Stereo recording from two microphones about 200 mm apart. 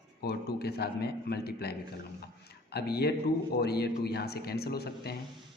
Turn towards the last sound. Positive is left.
turn(degrees=50)  # may be behind; listen again after turning